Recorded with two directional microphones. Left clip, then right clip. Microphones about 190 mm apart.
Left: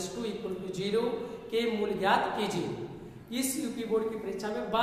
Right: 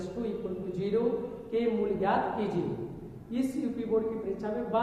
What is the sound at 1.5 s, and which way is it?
Speech, 10° left (ahead or behind).